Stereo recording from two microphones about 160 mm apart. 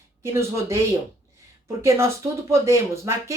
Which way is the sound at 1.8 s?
15° right (ahead or behind).